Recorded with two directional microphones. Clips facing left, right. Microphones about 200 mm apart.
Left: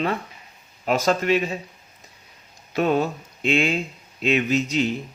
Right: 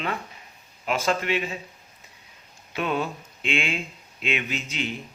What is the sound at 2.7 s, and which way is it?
A man's voice, 40° left (ahead or behind).